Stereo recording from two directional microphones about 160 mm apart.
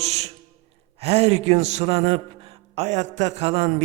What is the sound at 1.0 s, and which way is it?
A man's voice, 40° right (ahead or behind).